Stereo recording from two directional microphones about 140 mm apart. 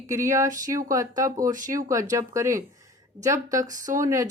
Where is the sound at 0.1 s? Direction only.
20° right (ahead or behind).